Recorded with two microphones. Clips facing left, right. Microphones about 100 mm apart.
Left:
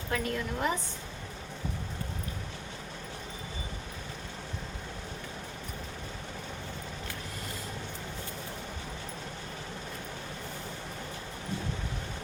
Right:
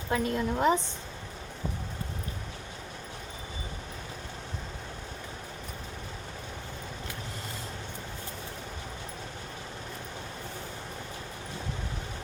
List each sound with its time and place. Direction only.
0.1 s a woman's voice: 25° right (ahead or behind)